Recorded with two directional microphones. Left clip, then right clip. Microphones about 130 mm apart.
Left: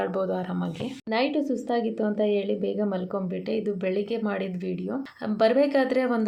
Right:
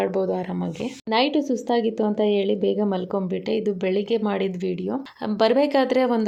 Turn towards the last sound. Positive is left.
turn(degrees=-50)  # may be behind; listen again after turning